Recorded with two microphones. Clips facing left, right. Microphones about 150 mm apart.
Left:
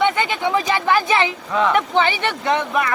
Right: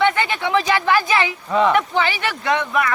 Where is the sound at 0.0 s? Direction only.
20° left (ahead or behind).